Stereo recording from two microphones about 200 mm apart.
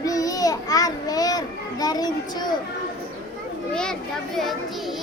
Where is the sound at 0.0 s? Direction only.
15° left (ahead or behind).